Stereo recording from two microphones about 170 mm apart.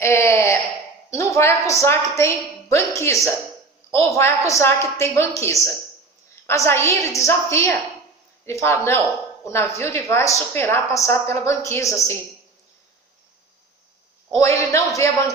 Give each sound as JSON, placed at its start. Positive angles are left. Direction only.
{"t": 0.0, "sound": "a sound", "side_deg": 15}
{"t": 1.1, "sound": "a woman's voice", "side_deg": 15}
{"t": 14.3, "sound": "a woman's voice", "side_deg": 15}